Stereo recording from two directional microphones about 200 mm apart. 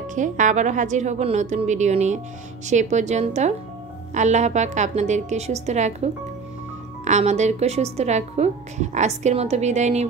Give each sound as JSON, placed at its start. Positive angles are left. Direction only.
{"t": 0.1, "sound": "a woman's voice", "side_deg": -40}
{"t": 7.1, "sound": "a woman's voice", "side_deg": -35}